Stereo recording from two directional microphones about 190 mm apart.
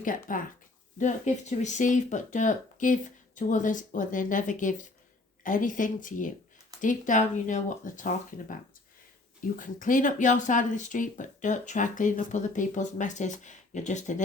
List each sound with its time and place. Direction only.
0.0 s speech: 45° left (ahead or behind)
9.6 s speech: 45° left (ahead or behind)